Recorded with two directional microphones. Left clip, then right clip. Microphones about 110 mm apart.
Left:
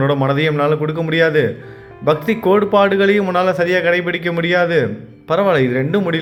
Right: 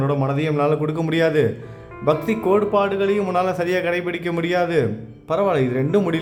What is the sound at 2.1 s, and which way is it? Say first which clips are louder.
Speech: left 4 dB; centre (ahead or behind).